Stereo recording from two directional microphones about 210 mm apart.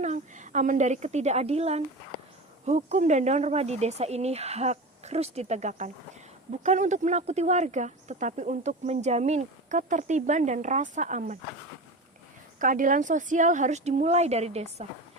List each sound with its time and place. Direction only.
0.0 s a woman's voice: 35° right (ahead or behind)
12.5 s speech: 40° right (ahead or behind)